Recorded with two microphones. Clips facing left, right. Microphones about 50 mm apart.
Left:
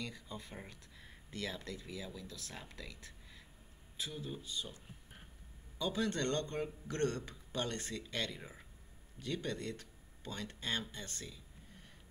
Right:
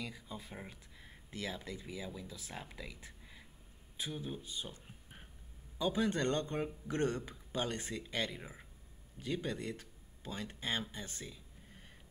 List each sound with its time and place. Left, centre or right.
0.0 s a man's voice: centre